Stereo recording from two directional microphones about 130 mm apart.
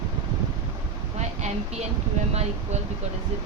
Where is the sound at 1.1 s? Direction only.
60° right (ahead or behind).